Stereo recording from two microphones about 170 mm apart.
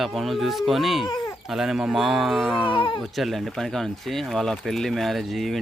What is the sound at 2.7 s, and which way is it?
Speech, 30° left (ahead or behind).